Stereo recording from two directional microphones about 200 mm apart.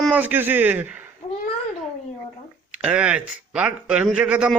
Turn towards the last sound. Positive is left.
turn(degrees=-5)  # may be behind; listen again after turning